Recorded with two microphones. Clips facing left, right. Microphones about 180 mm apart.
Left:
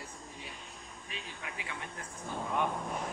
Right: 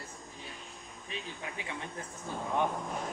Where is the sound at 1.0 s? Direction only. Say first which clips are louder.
Right 4 dB; 25° right (ahead or behind).